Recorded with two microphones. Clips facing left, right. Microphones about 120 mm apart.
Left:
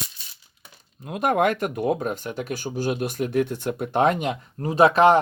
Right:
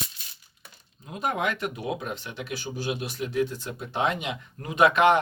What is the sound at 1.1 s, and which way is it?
Speech, 60° left (ahead or behind).